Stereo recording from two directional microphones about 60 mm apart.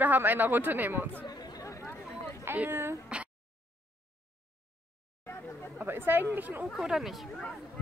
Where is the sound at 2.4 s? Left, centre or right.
Right.